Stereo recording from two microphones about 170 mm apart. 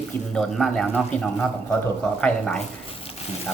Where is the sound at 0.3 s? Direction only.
5° left (ahead or behind).